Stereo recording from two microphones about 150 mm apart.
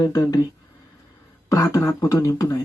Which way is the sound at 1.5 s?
20° left (ahead or behind).